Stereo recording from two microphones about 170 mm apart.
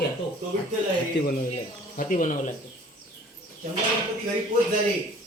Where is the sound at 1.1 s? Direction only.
90° left.